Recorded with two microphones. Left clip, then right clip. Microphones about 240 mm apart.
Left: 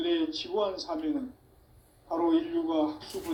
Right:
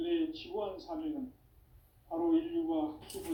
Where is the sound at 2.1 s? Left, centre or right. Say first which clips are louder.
Left 5 dB; left.